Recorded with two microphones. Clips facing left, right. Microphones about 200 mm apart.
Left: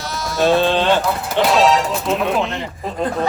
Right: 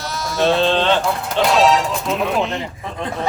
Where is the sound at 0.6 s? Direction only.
15° left (ahead or behind).